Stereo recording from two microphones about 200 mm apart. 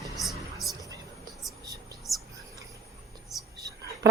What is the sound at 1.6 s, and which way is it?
Whispering, 15° right (ahead or behind).